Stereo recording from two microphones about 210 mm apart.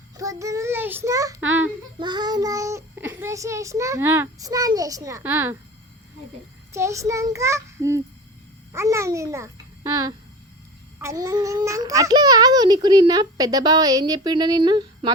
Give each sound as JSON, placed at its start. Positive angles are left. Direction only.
{"t": 0.2, "sound": "child singing", "side_deg": -15}
{"t": 3.2, "sound": "a child's voice", "side_deg": -15}
{"t": 6.7, "sound": "a child's voice", "side_deg": -15}